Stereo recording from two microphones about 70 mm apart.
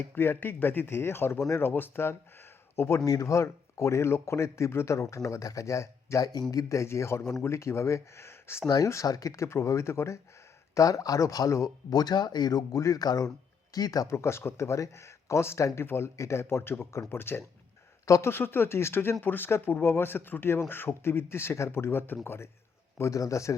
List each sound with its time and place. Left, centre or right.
0.1 s a man's voice: left
3.0 s speech: left
6.5 s speech: left
8.6 s speech: left
9.0 s speech: left
10.8 s speech: left
11.9 s speech: left
14.1 s speech: left
18.0 s speech: left
18.3 s speech: left
23.0 s speech: left